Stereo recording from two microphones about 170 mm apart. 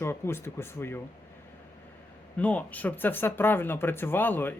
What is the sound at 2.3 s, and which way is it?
Speech, 10° left (ahead or behind).